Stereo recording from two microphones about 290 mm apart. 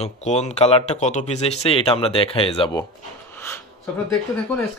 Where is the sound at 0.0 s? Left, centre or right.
Left.